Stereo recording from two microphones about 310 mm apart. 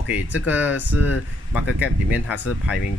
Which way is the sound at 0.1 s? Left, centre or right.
Centre.